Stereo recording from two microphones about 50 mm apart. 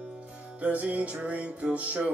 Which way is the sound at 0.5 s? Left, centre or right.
Right.